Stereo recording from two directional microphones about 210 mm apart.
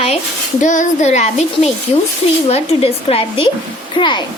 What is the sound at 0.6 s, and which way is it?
A child's voice, 35° left (ahead or behind).